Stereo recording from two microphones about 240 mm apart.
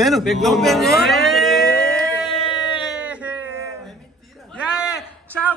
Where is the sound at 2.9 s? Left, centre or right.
Centre.